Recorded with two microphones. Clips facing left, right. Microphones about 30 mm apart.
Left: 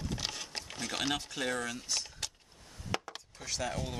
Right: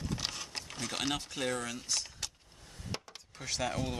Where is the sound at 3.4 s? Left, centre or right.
Centre.